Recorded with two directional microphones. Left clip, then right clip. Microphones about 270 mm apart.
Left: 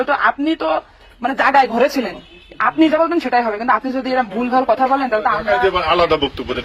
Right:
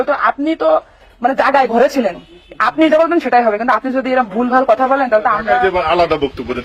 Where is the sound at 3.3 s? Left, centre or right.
Right.